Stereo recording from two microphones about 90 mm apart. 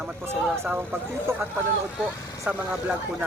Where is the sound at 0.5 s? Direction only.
25° right (ahead or behind).